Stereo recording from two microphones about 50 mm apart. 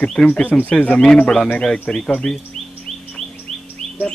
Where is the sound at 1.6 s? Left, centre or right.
Centre.